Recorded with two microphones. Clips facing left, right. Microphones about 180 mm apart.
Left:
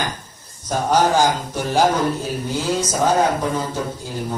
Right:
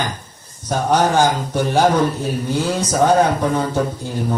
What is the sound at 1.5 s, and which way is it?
Speech, 60° right (ahead or behind).